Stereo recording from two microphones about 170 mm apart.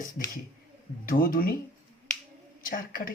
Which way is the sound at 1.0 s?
60° left (ahead or behind).